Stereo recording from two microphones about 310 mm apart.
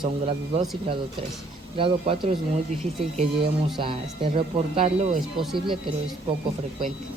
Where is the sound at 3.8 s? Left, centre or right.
Centre.